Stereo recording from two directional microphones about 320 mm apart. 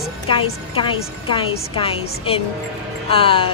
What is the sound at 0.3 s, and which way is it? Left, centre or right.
A woman's voice, centre.